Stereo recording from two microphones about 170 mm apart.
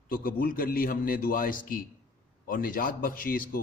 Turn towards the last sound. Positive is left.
turn(degrees=55)  # may be behind; listen again after turning